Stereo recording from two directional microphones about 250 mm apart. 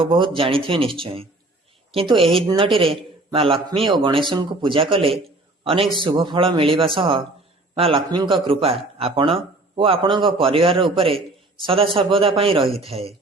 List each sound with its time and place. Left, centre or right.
0.0 s a man's voice: right